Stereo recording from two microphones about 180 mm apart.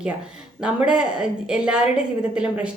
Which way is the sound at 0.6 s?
5° right (ahead or behind).